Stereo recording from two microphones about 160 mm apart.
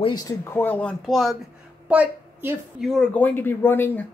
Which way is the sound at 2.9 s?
10° left (ahead or behind).